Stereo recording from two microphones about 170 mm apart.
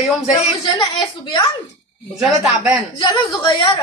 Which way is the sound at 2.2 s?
5° right (ahead or behind).